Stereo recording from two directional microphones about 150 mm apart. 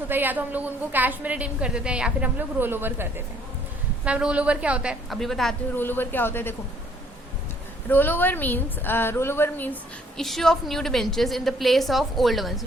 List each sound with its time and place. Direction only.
0.1 s a woman's voice: 10° right (ahead or behind)
5.7 s a woman's voice: 15° left (ahead or behind)
7.9 s a woman's voice: 15° left (ahead or behind)
10.2 s a woman's voice: centre (ahead or behind)